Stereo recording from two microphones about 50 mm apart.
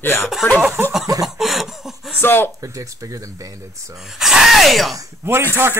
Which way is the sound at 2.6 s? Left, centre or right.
Right.